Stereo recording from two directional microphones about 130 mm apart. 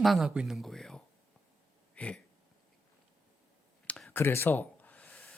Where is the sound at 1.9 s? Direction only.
10° left (ahead or behind).